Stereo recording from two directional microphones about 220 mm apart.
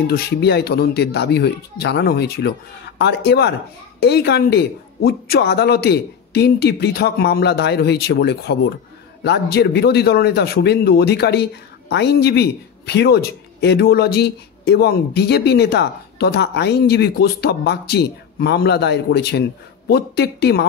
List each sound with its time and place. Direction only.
0.0 s speech: 45° left (ahead or behind)